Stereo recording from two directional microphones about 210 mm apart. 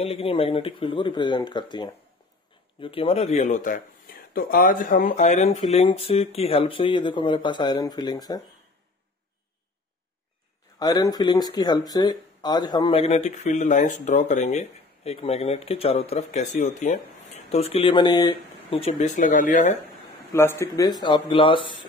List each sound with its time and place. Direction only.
0.0 s speech: 25° left (ahead or behind)
2.8 s speech: 25° left (ahead or behind)
10.8 s speech: 20° left (ahead or behind); by 19.8 s 35° left (ahead or behind)
20.3 s speech: 10° left (ahead or behind)